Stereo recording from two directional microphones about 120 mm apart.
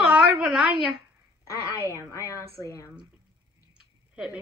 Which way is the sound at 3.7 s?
5° right (ahead or behind).